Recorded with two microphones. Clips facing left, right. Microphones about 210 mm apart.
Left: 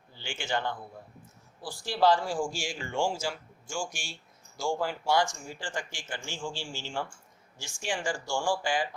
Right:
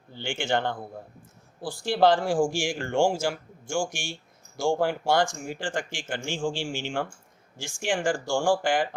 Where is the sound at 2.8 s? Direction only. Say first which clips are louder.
Right 6 dB; 75° right (ahead or behind).